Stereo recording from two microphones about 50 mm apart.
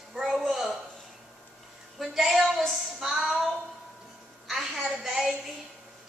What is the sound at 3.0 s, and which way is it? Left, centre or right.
Speech, centre.